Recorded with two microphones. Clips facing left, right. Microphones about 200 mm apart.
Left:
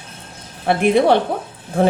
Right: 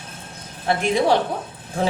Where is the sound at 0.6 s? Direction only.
60° left (ahead or behind).